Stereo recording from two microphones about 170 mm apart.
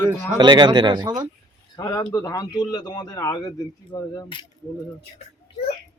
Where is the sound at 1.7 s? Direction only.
25° left (ahead or behind).